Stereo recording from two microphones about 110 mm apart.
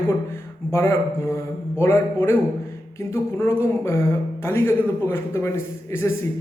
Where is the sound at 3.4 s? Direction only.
25° left (ahead or behind).